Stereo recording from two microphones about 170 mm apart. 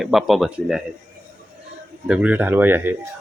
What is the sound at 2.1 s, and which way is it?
Speech, 5° right (ahead or behind).